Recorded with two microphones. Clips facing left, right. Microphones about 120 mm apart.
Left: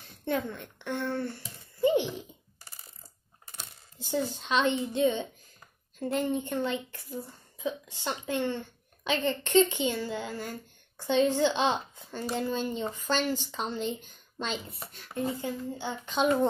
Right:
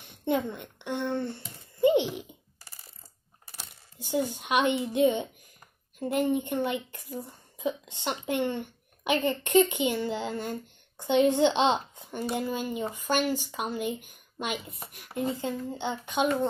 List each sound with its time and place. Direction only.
0.0 s speech: 15° right (ahead or behind)
4.0 s speech: 15° right (ahead or behind)